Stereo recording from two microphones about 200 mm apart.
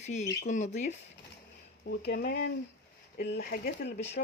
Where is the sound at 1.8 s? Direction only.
55° left (ahead or behind).